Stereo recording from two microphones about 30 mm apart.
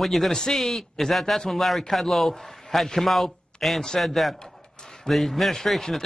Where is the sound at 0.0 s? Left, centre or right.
Centre.